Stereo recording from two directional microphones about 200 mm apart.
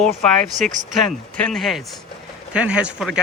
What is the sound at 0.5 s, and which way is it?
Speech, 40° right (ahead or behind).